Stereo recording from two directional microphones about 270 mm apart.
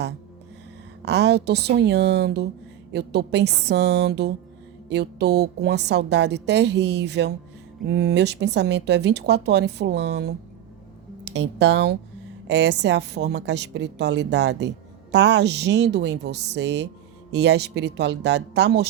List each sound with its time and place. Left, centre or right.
1.0 s a woman's voice: right